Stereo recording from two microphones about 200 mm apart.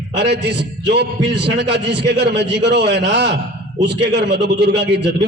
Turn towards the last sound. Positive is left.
turn(degrees=-60)  # may be behind; listen again after turning